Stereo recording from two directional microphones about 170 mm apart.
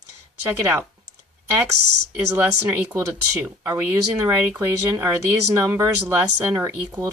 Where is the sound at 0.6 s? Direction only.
10° right (ahead or behind).